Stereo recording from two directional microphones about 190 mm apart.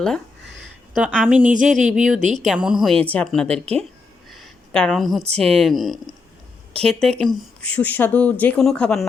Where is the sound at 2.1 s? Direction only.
40° right (ahead or behind).